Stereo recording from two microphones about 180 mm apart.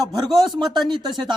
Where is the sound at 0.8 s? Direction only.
25° right (ahead or behind).